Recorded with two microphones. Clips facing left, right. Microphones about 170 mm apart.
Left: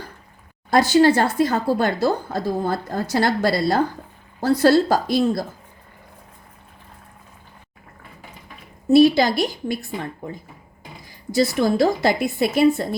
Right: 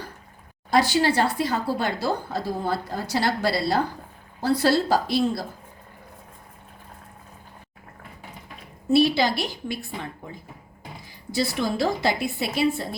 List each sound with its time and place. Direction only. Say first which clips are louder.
0.7 s speech: left 6 dB; 50° left (ahead or behind)
8.9 s speech: left 6 dB; 45° left (ahead or behind)
11.3 s speech: left 6 dB; 45° left (ahead or behind)